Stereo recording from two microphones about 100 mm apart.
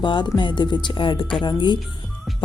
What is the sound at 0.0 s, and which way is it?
Speech, 50° left (ahead or behind).